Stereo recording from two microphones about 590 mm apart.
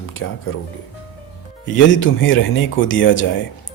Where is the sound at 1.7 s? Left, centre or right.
Centre.